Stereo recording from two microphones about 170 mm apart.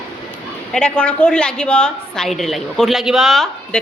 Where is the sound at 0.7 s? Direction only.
5° left (ahead or behind).